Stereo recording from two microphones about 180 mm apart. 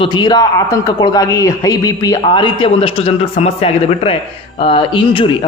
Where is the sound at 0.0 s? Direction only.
25° left (ahead or behind).